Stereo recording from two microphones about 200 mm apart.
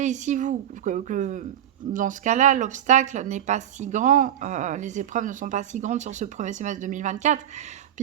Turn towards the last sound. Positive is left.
turn(degrees=-35)  # may be behind; listen again after turning